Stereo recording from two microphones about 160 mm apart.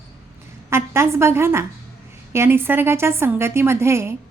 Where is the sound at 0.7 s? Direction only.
15° right (ahead or behind).